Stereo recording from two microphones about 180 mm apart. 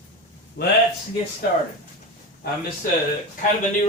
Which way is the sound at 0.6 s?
70° left (ahead or behind).